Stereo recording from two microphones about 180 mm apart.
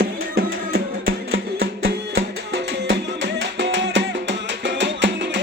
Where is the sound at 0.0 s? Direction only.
60° right (ahead or behind).